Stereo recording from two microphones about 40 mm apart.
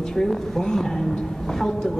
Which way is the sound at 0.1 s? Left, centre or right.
Centre.